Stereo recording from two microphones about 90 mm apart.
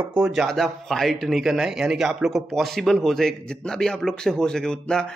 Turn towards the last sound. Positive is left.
turn(degrees=10)  # may be behind; listen again after turning